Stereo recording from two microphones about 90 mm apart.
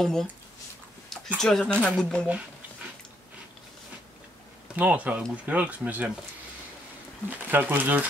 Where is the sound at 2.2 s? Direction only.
15° right (ahead or behind).